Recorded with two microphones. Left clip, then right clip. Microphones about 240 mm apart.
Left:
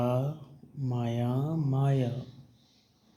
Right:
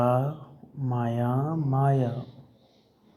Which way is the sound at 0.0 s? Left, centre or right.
Centre.